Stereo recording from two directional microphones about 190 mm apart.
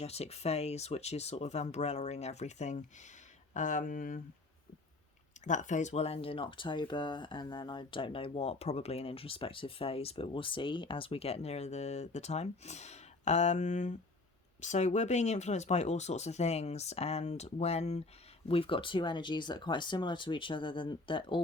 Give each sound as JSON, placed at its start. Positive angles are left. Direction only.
{"t": 0.0, "sound": "speech", "side_deg": 35}
{"t": 5.5, "sound": "speech", "side_deg": 40}